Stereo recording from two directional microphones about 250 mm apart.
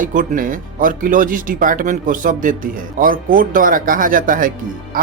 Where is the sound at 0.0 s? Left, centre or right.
Right.